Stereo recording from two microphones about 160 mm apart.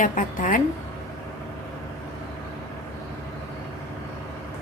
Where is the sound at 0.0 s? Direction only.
50° left (ahead or behind).